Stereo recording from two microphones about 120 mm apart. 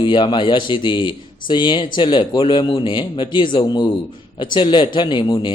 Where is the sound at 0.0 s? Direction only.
40° left (ahead or behind).